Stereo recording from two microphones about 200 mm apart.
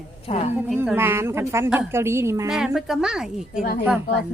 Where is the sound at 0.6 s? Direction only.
5° right (ahead or behind).